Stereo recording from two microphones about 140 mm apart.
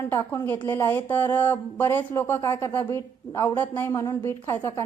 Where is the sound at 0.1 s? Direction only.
20° left (ahead or behind).